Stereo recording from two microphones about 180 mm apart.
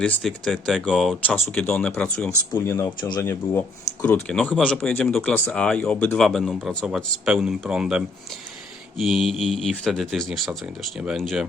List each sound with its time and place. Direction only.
0.0 s speech: centre (ahead or behind)
2.6 s speech: 15° left (ahead or behind)
4.0 s speech: 5° left (ahead or behind)